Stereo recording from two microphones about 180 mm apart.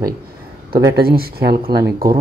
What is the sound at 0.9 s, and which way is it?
Speech, 60° right (ahead or behind).